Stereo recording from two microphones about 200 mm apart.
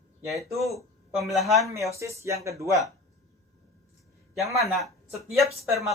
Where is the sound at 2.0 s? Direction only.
15° right (ahead or behind).